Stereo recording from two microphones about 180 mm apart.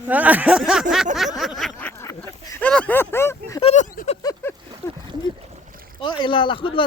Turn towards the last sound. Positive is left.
turn(degrees=30)  # may be behind; listen again after turning